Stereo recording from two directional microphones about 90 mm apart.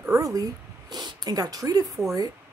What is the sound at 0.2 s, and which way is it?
Speech, 40° right (ahead or behind).